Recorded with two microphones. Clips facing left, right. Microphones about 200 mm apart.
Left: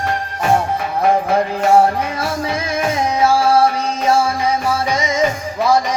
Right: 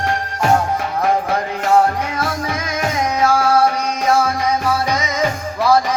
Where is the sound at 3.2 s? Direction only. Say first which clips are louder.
Left 2 dB; 30° left (ahead or behind).